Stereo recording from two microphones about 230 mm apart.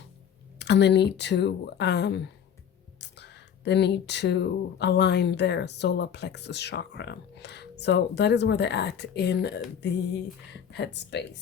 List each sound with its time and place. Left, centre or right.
0.6 s speech: left